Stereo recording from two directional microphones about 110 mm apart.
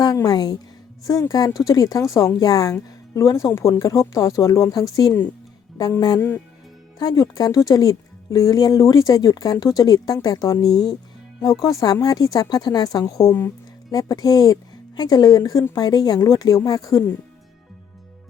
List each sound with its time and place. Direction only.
0.0 s speech: 35° left (ahead or behind)
6.1 s speech: 20° left (ahead or behind)
7.0 s speech: 35° left (ahead or behind)